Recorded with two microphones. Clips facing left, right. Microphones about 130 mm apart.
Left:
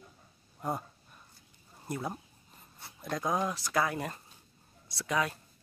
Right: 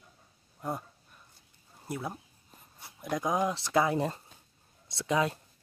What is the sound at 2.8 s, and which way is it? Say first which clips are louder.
Speech: right 2 dB; 15° right (ahead or behind).